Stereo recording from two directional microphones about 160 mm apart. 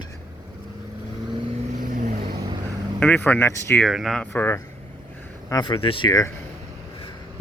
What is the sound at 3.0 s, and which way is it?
Speech, 10° left (ahead or behind).